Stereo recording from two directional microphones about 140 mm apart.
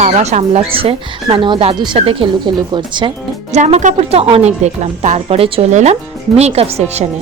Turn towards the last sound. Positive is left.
turn(degrees=-50)  # may be behind; listen again after turning